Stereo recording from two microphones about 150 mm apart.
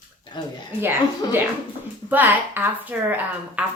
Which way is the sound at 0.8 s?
15° right (ahead or behind).